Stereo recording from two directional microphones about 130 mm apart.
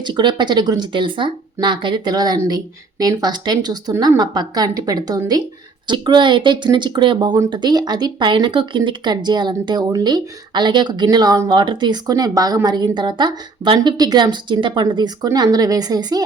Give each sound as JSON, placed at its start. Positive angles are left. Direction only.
{"t": 0.0, "sound": "speech", "side_deg": -35}